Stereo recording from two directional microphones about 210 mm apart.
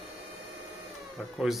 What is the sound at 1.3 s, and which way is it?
Speech, centre (ahead or behind).